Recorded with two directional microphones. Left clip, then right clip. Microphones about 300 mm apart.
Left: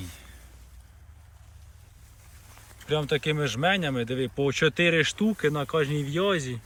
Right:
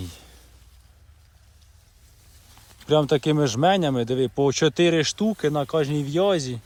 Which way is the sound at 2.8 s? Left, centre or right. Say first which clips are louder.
Right 6 dB; centre.